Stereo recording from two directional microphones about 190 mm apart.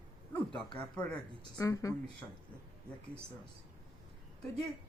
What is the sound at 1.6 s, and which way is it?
Speech, 15° left (ahead or behind).